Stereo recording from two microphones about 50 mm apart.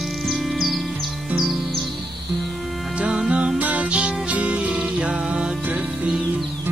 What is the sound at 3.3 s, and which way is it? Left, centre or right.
Music, right.